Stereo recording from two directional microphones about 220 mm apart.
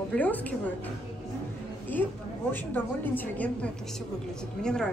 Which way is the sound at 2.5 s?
10° left (ahead or behind).